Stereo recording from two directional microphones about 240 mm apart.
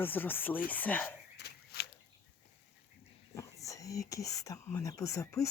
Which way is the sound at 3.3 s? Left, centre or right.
Centre.